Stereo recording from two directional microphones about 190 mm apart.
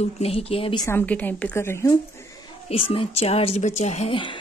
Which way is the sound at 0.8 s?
10° left (ahead or behind).